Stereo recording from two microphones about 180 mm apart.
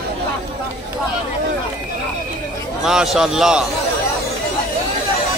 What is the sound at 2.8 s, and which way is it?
Speech, 5° right (ahead or behind).